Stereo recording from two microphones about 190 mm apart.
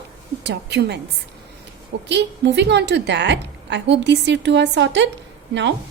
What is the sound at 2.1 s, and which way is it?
A woman's voice, 65° right (ahead or behind).